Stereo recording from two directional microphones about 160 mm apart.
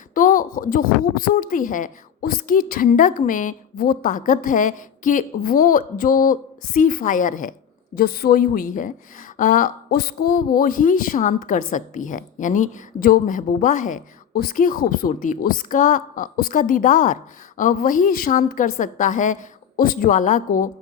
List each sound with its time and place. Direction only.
0.1 s speech: 55° left (ahead or behind)
7.9 s speech: 70° left (ahead or behind); by 20.7 s 55° left (ahead or behind)